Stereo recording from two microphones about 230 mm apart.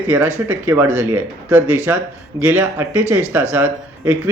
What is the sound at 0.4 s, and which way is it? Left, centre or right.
Speech, centre.